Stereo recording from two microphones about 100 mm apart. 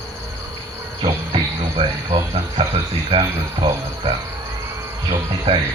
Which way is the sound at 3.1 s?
80° right.